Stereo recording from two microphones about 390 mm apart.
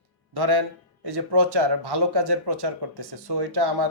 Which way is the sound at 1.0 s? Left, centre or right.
Right.